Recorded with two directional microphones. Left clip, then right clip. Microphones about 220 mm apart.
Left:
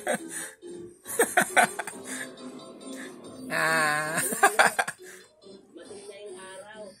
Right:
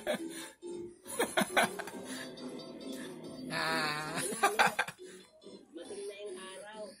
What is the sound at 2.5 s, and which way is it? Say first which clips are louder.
Music: left 2 dB; 40° right (ahead or behind).